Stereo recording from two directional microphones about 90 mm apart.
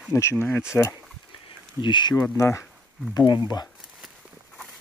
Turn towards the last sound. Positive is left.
turn(degrees=55)  # may be behind; listen again after turning